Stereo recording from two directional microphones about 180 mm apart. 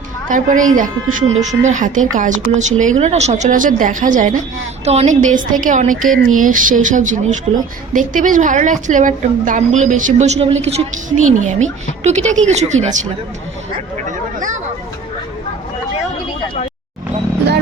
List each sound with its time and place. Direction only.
0.3 s a woman's voice: 45° right (ahead or behind)